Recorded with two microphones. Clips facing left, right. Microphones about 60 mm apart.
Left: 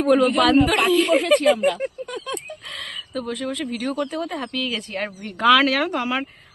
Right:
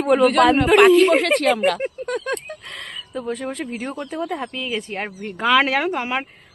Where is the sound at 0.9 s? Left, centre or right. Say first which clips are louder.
Right 6 dB; right.